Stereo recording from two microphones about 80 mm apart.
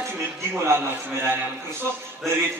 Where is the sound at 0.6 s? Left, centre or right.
Right.